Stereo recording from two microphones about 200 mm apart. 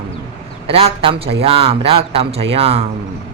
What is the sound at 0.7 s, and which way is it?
A woman's voice, 25° right (ahead or behind).